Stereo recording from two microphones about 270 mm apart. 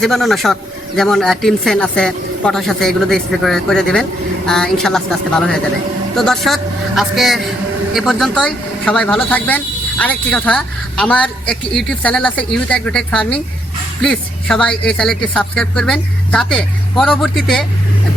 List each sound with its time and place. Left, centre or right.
0.0 s speech: centre